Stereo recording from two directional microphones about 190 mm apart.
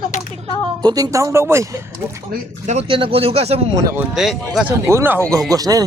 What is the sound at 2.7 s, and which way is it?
Speech, 30° right (ahead or behind).